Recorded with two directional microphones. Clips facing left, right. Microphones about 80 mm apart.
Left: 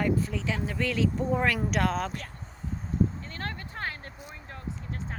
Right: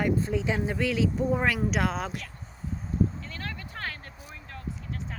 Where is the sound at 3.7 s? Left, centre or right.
Left.